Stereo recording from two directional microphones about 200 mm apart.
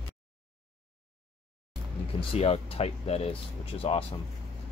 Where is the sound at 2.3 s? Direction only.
30° left (ahead or behind).